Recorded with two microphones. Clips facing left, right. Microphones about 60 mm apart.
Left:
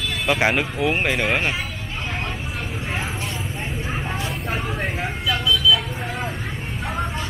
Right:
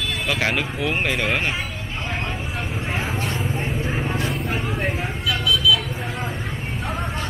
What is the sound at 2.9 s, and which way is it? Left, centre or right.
Vehicle, centre.